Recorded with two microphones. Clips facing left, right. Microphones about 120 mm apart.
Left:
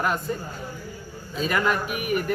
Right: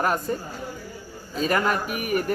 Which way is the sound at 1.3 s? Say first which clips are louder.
Right 1 dB; 40° right (ahead or behind).